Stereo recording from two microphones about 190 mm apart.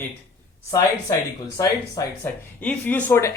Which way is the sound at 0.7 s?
15° left (ahead or behind).